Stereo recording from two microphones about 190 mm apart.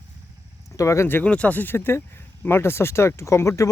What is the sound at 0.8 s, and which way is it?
Speech, 15° left (ahead or behind).